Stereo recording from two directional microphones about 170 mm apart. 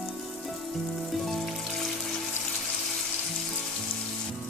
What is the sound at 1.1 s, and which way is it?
Rain on surface, centre (ahead or behind).